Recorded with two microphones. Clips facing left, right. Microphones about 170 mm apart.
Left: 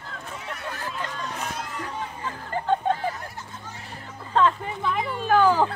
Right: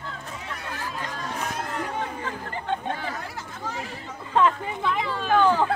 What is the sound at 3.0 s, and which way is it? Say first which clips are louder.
Chatter: left 2 dB; 90° right.